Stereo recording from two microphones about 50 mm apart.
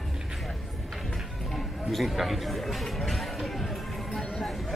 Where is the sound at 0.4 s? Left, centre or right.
Centre.